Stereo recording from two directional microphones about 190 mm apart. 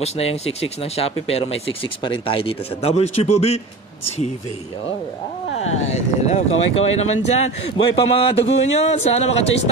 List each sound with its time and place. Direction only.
0.0 s speech: 30° left (ahead or behind)
5.9 s speech: 35° left (ahead or behind)